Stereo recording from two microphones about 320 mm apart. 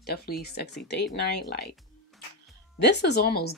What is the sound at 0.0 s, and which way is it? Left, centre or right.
Speech, left.